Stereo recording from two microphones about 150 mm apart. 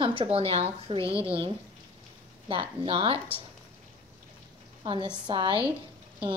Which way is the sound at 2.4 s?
35° right (ahead or behind).